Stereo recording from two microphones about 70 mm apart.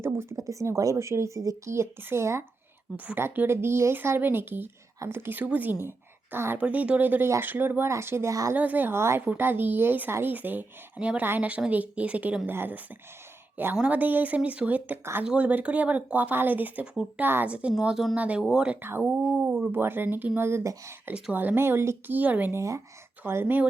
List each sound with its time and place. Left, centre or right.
0.0 s speech: right
0.3 s speech: right
6.6 s speech: centre; by 8.3 s right
8.3 s speech: right
8.5 s speech: right
9.2 s speech: right
12.5 s speech: right
13.8 s speech: right
17.5 s a woman's voice: centre
18.8 s speech: right
22.1 s speech: right
22.5 s speech: right
23.2 s speech: right